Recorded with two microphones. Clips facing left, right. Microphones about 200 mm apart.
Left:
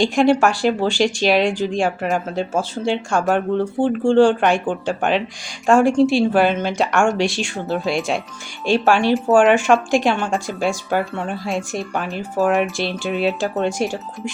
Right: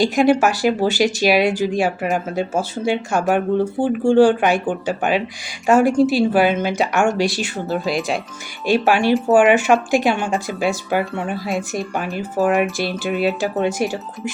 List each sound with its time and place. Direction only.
0.0 s speech: 5° right (ahead or behind)